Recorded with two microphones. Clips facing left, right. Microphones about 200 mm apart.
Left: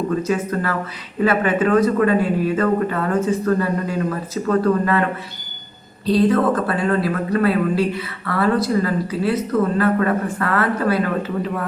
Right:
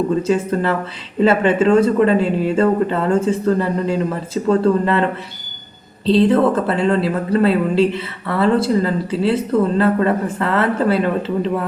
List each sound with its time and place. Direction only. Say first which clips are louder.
0.2 s speech: right 4 dB; 25° right (ahead or behind)
6.1 s speech: right 3 dB; 25° right (ahead or behind)